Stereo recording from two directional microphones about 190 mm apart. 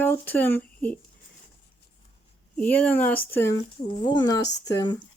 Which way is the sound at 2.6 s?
10° left (ahead or behind).